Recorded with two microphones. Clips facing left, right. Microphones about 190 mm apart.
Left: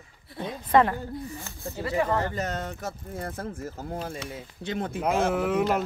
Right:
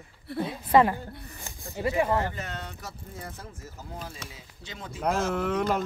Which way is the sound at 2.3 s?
40° left (ahead or behind).